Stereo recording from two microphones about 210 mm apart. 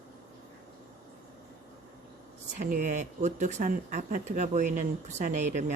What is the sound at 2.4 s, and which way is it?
Speech, 35° right (ahead or behind).